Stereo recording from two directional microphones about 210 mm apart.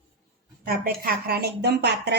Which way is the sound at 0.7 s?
45° right (ahead or behind).